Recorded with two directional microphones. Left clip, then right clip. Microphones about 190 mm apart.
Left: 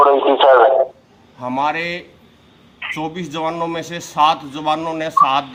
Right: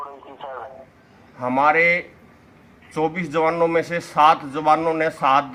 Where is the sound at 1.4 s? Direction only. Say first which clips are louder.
Right 3 dB; 10° right (ahead or behind).